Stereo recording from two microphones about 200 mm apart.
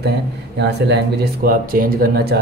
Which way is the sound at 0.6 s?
60° right (ahead or behind).